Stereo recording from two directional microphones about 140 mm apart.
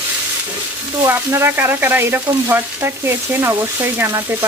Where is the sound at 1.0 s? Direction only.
15° right (ahead or behind).